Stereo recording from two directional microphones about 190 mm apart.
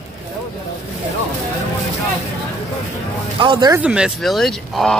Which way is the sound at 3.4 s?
25° right (ahead or behind).